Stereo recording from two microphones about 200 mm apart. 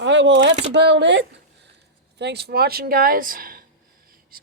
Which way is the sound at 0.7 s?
60° right (ahead or behind).